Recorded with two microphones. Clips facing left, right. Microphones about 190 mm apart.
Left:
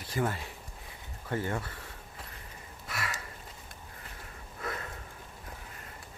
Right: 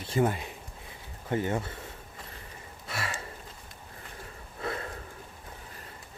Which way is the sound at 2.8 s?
30° right (ahead or behind).